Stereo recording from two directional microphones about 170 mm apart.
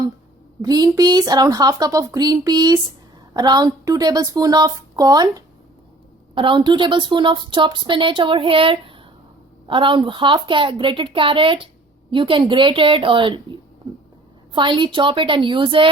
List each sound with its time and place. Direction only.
0.6 s a woman's voice: 25° right (ahead or behind)
14.5 s a woman's voice: 30° right (ahead or behind)